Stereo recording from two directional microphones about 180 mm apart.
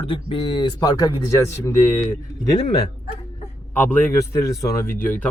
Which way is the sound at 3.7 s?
10° left (ahead or behind).